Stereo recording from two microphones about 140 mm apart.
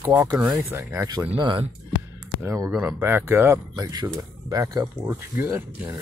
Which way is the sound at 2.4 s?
20° right (ahead or behind).